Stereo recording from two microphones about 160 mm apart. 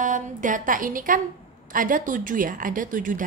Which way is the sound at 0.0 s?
55° right (ahead or behind).